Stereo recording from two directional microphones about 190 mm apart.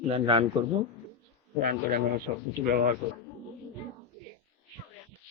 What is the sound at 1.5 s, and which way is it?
A man's voice, 50° right (ahead or behind).